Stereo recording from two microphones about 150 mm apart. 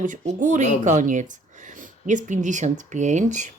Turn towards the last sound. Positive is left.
turn(degrees=-55)  # may be behind; listen again after turning